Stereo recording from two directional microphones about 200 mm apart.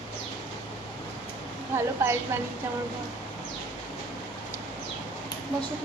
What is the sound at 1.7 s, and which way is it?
Speech, 10° right (ahead or behind).